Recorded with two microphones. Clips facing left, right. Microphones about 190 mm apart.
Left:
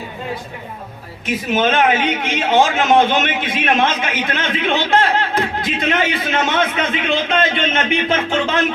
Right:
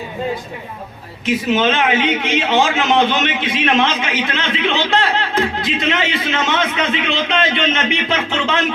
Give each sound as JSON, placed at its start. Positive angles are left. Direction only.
{"t": 1.2, "sound": "a man's voice", "side_deg": 50}